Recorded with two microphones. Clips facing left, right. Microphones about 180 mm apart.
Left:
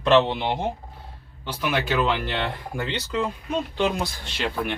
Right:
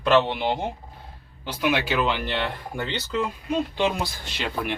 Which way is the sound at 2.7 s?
Centre (ahead or behind).